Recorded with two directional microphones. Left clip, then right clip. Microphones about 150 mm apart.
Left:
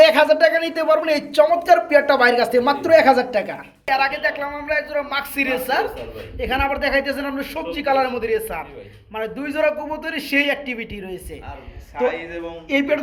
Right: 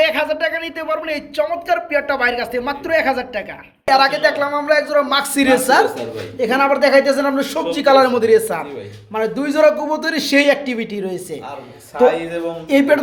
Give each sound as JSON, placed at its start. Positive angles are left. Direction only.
{"t": 0.0, "sound": "speech", "side_deg": 5}
{"t": 3.8, "sound": "speech", "side_deg": -30}
{"t": 6.4, "sound": "a man's voice", "side_deg": -20}
{"t": 12.0, "sound": "a sound", "side_deg": -65}
{"t": 12.7, "sound": "speech", "side_deg": -40}